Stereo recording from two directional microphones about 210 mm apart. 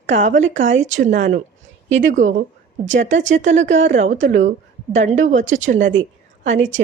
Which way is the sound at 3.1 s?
65° right (ahead or behind).